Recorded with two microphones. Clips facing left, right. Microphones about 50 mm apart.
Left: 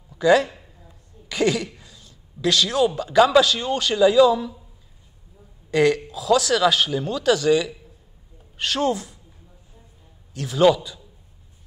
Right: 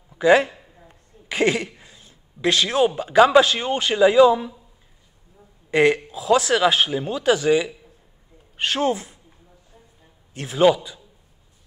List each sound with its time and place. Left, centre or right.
0.2 s a man's voice: right
1.8 s a sound: right
3.0 s a man's voice: right
5.7 s a man's voice: right
10.3 s a man's voice: right
10.6 s a man's voice: centre